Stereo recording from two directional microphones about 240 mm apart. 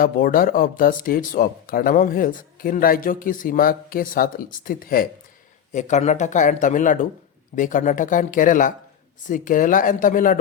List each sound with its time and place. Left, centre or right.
0.0 s speech: left